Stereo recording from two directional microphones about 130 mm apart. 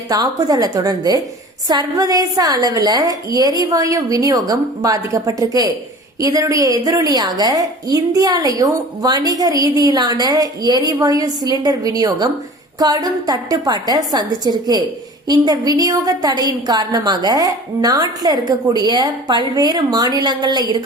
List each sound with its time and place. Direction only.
0.1 s a woman's voice: 30° right (ahead or behind)